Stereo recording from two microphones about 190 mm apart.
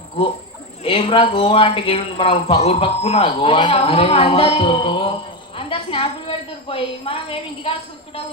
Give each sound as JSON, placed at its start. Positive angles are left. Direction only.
{"t": 0.9, "sound": "a man's voice", "side_deg": 30}